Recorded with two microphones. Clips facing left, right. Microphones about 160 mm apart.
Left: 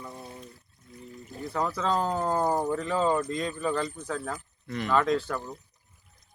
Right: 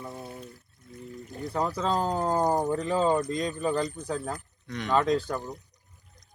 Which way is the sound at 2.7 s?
35° right (ahead or behind).